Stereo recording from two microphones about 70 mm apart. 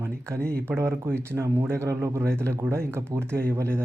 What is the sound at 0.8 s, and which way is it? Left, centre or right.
Speech, right.